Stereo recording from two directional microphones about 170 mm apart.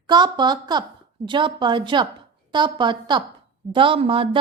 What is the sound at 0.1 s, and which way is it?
A woman's voice, 25° right (ahead or behind).